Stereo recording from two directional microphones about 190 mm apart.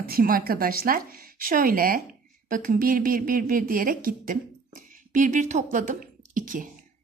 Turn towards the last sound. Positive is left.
turn(degrees=-45)  # may be behind; listen again after turning